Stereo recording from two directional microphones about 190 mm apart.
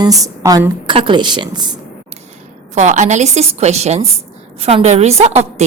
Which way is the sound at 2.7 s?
40° right (ahead or behind).